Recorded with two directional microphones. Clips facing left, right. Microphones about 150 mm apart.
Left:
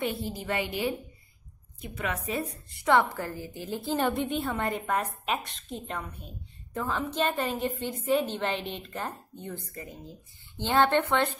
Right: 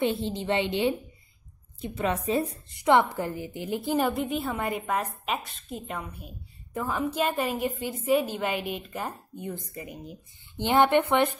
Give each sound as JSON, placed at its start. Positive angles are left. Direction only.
{"t": 0.0, "sound": "a woman's voice", "side_deg": -25}
{"t": 4.0, "sound": "a woman's voice", "side_deg": 0}